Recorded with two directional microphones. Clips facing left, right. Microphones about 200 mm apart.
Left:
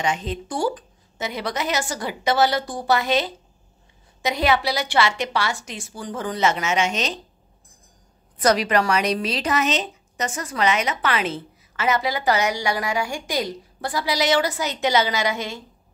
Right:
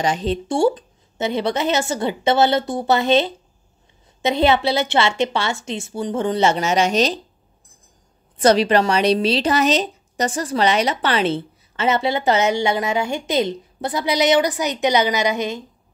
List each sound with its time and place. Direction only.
0.0 s speech: 35° right (ahead or behind)
8.4 s speech: 30° right (ahead or behind)